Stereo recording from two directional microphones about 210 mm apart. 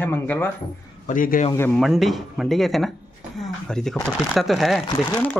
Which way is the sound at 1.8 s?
Centre (ahead or behind).